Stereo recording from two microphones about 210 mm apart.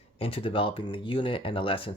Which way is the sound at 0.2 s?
25° left (ahead or behind).